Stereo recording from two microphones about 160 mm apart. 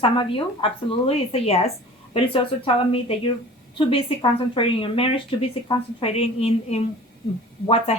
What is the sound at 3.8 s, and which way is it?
Speech, 35° left (ahead or behind).